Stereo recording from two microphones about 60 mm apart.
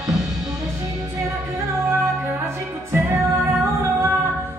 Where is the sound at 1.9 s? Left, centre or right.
Right.